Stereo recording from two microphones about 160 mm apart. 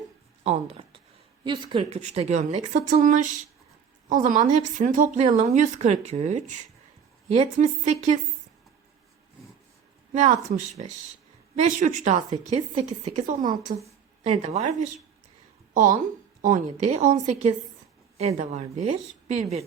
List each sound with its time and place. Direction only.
0.4 s speech: 45° right (ahead or behind)
1.5 s a woman's voice: 30° right (ahead or behind)
2.0 s speech: 45° right (ahead or behind)
10.2 s speech: 50° right (ahead or behind)
14.3 s a woman's voice: 40° right (ahead or behind)
15.7 s a woman's voice: 55° right (ahead or behind)